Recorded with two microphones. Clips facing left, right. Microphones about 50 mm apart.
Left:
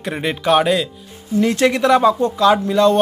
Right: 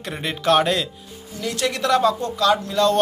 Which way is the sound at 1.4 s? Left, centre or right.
Left.